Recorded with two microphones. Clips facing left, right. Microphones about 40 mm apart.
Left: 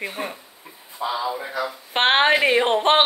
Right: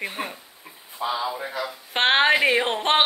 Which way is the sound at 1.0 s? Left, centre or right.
Right.